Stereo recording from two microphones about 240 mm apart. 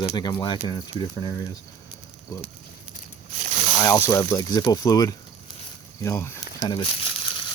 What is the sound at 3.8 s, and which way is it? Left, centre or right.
Speech, centre.